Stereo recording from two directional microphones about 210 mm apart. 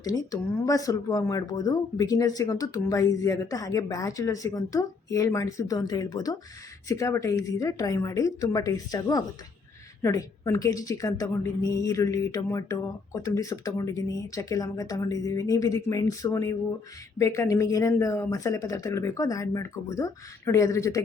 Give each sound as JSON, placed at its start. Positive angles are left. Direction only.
{"t": 0.0, "sound": "a woman's voice", "side_deg": 15}